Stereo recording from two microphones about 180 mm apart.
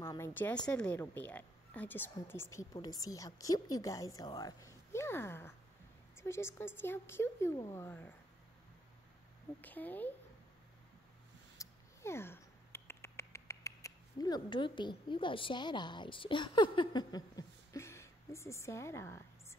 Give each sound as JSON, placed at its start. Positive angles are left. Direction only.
{"t": 0.0, "sound": "a woman's voice", "side_deg": 15}
{"t": 9.6, "sound": "a woman's voice", "side_deg": 10}
{"t": 11.5, "sound": "a sound", "side_deg": 15}